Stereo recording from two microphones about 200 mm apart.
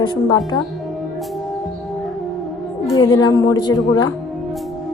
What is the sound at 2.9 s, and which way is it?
Speech, 20° left (ahead or behind).